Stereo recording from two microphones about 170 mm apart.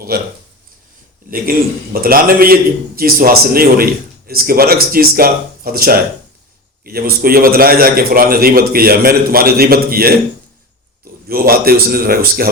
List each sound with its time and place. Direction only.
0.1 s a man's voice: 65° right (ahead or behind)
1.3 s a man's voice: 60° right (ahead or behind)
11.3 s a man's voice: 60° right (ahead or behind)